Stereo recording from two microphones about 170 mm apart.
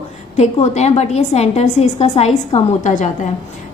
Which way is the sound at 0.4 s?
40° left (ahead or behind).